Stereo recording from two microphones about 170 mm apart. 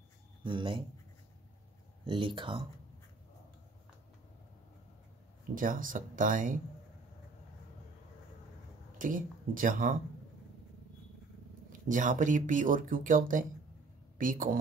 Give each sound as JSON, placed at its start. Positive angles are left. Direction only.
{"t": 0.4, "sound": "speech", "side_deg": -30}
{"t": 2.0, "sound": "speech", "side_deg": -30}
{"t": 5.5, "sound": "speech", "side_deg": -55}
{"t": 8.9, "sound": "speech", "side_deg": -50}
{"t": 11.9, "sound": "speech", "side_deg": -50}